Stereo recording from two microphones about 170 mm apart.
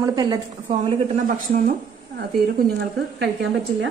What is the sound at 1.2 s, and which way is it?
Speech, 50° right (ahead or behind).